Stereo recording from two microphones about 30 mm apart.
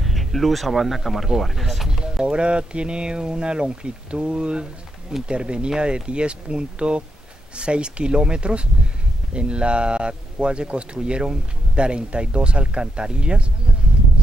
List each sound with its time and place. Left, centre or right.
0.0 s speech: centre
1.9 s a sound: right
2.2 s speech: right